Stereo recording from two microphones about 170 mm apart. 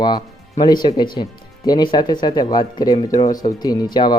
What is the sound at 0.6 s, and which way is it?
Speech, 25° left (ahead or behind).